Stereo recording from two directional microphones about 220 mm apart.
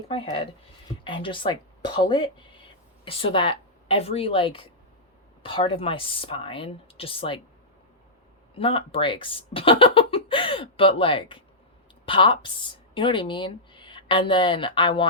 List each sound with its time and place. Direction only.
0.1 s a woman's voice: 25° left (ahead or behind)
8.5 s speech: 25° left (ahead or behind)